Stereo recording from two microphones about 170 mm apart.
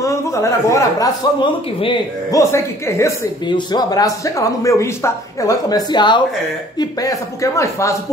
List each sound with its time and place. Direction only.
0.0 s speech: 15° left (ahead or behind)
2.5 s speech: 15° left (ahead or behind)